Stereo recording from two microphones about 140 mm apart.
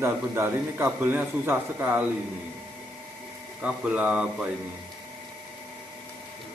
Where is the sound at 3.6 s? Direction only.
10° right (ahead or behind).